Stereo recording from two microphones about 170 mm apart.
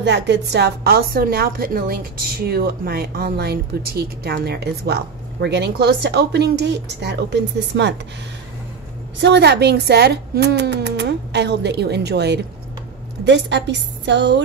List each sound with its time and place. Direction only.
0.0 s a woman's voice: 90° right
9.2 s a woman's voice: 85° right
13.2 s a woman's voice: 90° right